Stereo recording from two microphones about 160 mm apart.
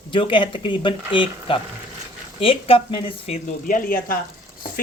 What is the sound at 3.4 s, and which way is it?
Speech, 60° left (ahead or behind).